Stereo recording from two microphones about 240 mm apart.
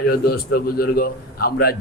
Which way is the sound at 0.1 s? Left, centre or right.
Left.